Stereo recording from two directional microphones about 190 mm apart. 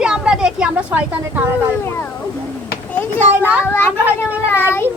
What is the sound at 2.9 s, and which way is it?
A child's voice, 10° left (ahead or behind).